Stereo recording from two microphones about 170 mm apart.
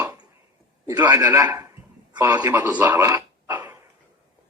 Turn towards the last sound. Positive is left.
turn(degrees=-10)  # may be behind; listen again after turning